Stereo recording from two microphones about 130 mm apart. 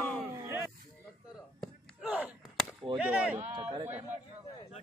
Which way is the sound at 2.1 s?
10° right (ahead or behind).